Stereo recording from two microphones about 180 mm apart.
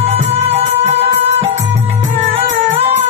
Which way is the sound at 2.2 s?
35° right (ahead or behind).